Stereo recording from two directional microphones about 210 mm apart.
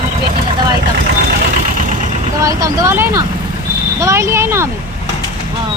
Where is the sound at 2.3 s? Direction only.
15° right (ahead or behind).